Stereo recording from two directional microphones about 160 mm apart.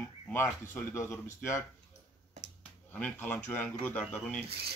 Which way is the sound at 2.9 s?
10° left (ahead or behind).